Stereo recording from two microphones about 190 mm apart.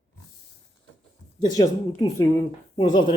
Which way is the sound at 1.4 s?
20° left (ahead or behind).